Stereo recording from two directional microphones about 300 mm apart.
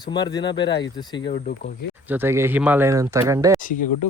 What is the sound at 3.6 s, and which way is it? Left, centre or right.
Speech, left.